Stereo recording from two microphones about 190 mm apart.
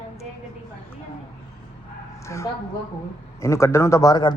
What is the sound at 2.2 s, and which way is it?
A man's voice, 15° left (ahead or behind).